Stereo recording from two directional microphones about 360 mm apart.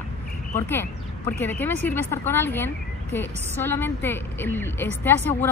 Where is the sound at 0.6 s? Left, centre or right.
Centre.